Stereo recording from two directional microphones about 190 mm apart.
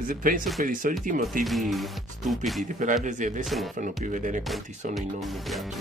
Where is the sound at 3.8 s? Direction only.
40° right (ahead or behind).